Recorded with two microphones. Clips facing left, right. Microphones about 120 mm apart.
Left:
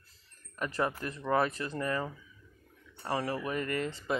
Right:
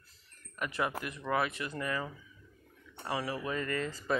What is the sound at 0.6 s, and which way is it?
Speech, 35° left (ahead or behind).